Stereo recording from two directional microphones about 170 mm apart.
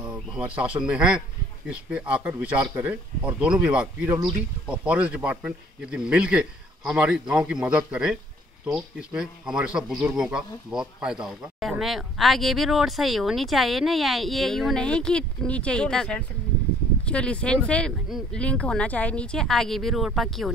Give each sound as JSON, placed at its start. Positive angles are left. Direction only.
{"t": 0.0, "sound": "speech", "side_deg": -5}